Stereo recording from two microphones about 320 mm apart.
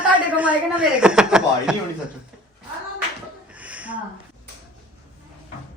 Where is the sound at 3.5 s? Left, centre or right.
Centre.